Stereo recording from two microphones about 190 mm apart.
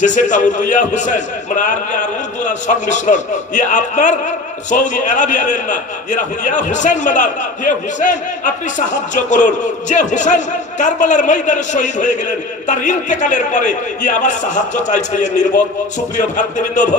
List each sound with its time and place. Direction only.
0.0 s a man's voice: 40° left (ahead or behind)